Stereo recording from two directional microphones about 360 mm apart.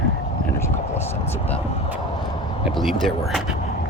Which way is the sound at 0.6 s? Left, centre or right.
Centre.